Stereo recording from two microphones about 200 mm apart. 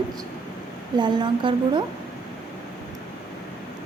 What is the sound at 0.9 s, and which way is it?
Speech, 20° right (ahead or behind).